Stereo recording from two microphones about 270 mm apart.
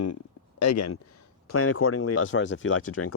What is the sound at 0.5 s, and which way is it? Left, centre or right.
Speech, left.